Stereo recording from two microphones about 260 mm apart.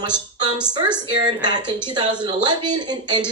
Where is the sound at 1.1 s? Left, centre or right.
Centre.